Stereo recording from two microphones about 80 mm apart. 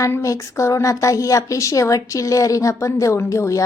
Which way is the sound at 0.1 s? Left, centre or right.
Left.